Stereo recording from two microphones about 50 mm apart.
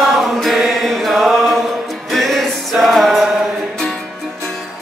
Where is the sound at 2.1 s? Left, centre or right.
Centre.